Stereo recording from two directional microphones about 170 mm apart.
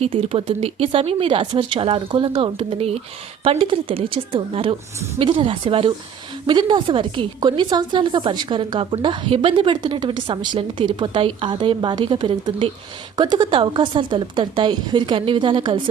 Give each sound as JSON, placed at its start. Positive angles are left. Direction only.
{"t": 0.0, "sound": "a woman's voice", "side_deg": -35}